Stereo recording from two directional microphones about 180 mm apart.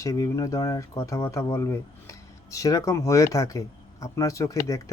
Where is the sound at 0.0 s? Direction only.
20° left (ahead or behind).